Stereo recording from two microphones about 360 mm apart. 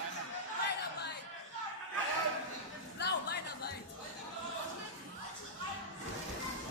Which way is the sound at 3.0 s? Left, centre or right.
Left.